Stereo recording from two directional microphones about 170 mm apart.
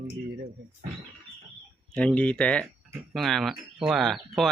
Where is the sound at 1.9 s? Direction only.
5° left (ahead or behind).